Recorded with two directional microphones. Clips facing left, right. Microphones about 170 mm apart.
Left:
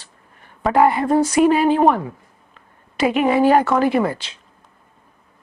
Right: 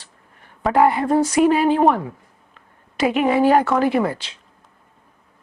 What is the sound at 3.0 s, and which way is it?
A woman's voice, 15° left (ahead or behind).